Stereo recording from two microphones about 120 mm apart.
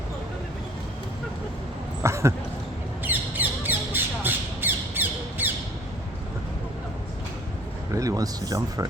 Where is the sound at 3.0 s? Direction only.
15° right (ahead or behind).